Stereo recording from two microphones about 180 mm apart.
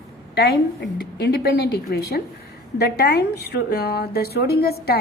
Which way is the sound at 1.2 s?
70° left (ahead or behind).